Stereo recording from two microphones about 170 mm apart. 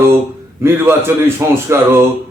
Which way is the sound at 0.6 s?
15° right (ahead or behind).